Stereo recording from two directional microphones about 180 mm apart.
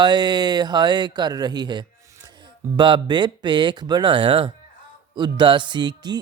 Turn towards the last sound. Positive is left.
turn(degrees=-25)  # may be behind; listen again after turning